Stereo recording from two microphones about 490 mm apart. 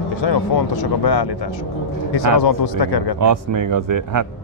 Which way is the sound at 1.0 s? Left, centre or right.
Left.